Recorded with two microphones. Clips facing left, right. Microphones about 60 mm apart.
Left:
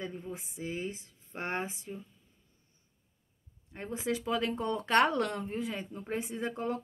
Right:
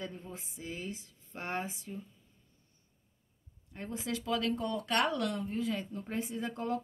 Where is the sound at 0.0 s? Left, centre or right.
Centre.